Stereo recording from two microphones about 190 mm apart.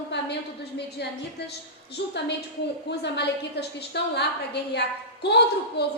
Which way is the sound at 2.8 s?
65° left (ahead or behind).